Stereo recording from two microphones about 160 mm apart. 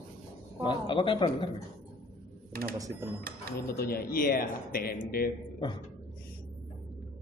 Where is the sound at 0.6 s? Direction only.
30° left (ahead or behind).